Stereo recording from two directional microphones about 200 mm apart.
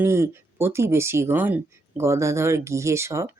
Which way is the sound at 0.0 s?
10° right (ahead or behind).